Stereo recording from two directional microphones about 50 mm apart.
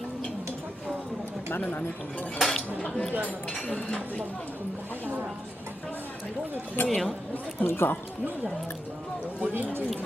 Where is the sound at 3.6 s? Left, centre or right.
Left.